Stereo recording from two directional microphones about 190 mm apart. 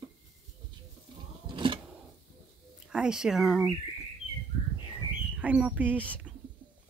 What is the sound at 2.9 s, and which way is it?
Speech, 5° right (ahead or behind).